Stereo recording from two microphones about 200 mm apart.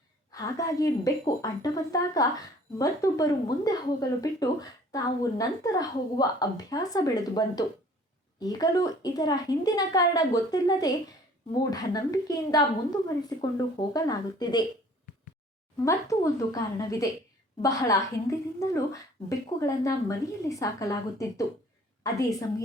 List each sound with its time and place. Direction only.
0.3 s a woman's voice: 15° left (ahead or behind)
15.8 s a woman's voice: 15° left (ahead or behind)